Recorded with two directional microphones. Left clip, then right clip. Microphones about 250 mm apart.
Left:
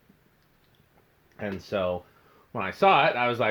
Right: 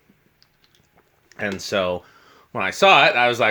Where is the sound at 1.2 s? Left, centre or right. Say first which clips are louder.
Right 8 dB; right.